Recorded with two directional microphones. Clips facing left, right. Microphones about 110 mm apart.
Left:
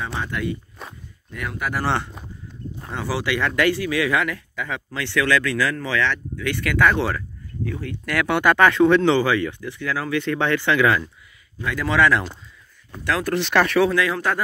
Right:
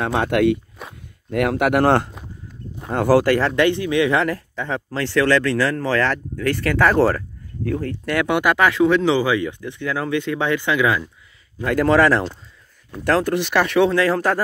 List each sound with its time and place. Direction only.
0.0 s speech: 65° right (ahead or behind)
0.8 s walk: 5° right (ahead or behind)
1.3 s speech: 80° right; by 3.4 s 45° right (ahead or behind)
3.4 s speech: 25° right (ahead or behind); by 7.2 s 40° right (ahead or behind)
7.6 s speech: 50° right (ahead or behind)
7.9 s speech: 25° right (ahead or behind)
11.6 s speech: 50° right (ahead or behind)
13.2 s speech: 15° right (ahead or behind)
13.7 s speech: 30° right (ahead or behind)